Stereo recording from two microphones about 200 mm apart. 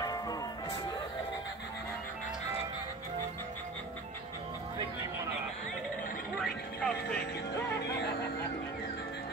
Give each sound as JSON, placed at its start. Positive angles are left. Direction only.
{"t": 0.0, "sound": "music", "side_deg": 20}
{"t": 6.4, "sound": "music", "side_deg": 5}